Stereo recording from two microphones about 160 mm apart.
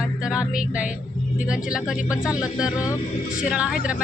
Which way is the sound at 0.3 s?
5° right (ahead or behind).